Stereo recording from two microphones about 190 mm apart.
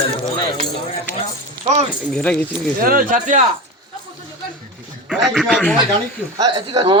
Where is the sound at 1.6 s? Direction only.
35° right (ahead or behind).